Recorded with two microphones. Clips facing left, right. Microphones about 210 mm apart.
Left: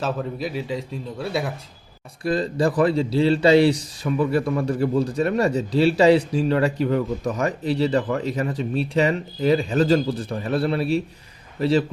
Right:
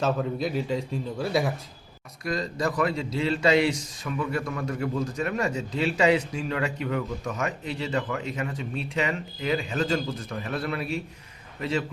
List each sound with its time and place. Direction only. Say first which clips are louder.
0.0 s a man's voice: even; centre (ahead or behind)
2.2 s speech: left 7 dB; 30° left (ahead or behind)